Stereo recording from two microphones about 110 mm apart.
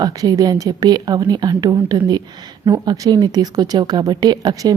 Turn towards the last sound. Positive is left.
turn(degrees=-35)  # may be behind; listen again after turning